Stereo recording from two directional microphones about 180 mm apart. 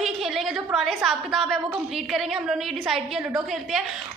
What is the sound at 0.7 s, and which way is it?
A woman's voice, centre (ahead or behind).